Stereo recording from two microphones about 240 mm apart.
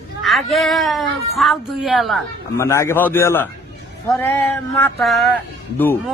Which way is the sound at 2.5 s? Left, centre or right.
Centre.